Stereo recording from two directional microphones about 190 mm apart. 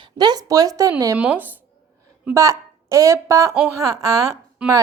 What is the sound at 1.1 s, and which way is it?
A woman's voice, 5° right (ahead or behind).